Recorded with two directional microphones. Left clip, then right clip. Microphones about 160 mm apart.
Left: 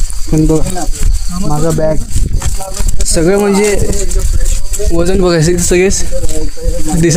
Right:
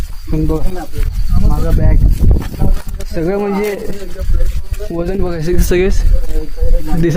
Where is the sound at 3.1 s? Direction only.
20° left (ahead or behind).